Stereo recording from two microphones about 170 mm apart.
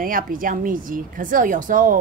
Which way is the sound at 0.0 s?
55° right (ahead or behind).